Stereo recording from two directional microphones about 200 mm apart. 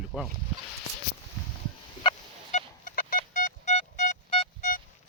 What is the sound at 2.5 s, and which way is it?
Telephone dialing, 40° left (ahead or behind).